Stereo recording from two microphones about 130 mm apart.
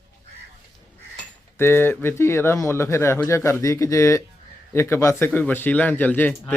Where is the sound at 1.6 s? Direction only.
15° left (ahead or behind).